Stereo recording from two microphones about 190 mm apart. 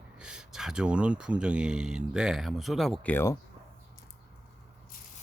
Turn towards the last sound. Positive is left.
turn(degrees=10)  # may be behind; listen again after turning